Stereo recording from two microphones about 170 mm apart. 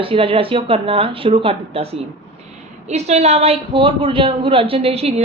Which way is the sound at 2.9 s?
40° right (ahead or behind).